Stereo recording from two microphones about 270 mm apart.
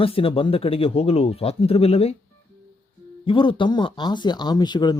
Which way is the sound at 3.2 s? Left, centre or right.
Centre.